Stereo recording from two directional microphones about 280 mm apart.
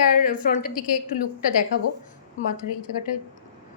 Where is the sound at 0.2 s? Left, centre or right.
Left.